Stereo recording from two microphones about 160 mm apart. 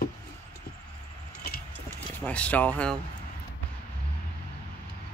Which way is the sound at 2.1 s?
10° left (ahead or behind).